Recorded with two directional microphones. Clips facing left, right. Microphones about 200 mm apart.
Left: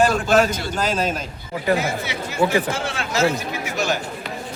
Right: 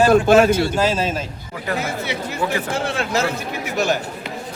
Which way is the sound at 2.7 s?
60° right (ahead or behind).